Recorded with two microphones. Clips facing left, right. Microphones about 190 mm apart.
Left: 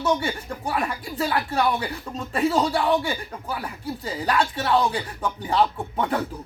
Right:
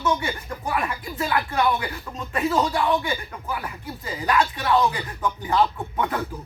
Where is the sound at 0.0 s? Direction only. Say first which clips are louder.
Left 1 dB; 30° left (ahead or behind).